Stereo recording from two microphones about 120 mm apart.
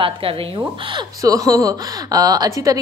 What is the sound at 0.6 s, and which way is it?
Speech, 40° right (ahead or behind).